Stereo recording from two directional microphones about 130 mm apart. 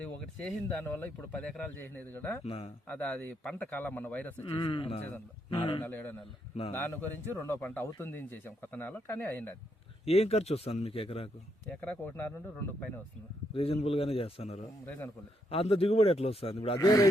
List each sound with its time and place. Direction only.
0.0 s a man's voice: 10° left (ahead or behind)
2.4 s a man's voice: 50° left (ahead or behind)
2.8 s a man's voice: 10° left (ahead or behind)
4.4 s a man's voice: 40° left (ahead or behind)
5.8 s a man's voice: 10° left (ahead or behind)
7.3 s a man's voice: 15° left (ahead or behind)
10.1 s a man's voice: 55° left (ahead or behind)
11.7 s a man's voice: 10° left (ahead or behind)
13.5 s a man's voice: 50° left (ahead or behind)
16.7 s a man's voice: 25° left (ahead or behind)